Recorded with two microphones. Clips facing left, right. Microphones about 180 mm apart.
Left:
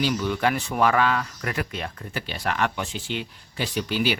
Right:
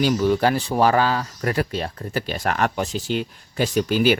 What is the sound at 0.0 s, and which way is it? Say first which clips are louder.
Speech: right 5 dB; 40° right (ahead or behind).